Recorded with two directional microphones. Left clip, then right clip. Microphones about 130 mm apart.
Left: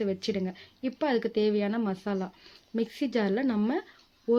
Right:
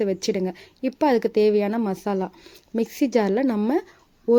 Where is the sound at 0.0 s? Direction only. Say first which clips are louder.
Right 7 dB; 50° right (ahead or behind).